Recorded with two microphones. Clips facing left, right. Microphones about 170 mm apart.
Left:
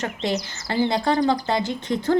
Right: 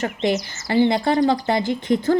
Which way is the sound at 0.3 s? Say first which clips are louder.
Right 4 dB; 15° right (ahead or behind).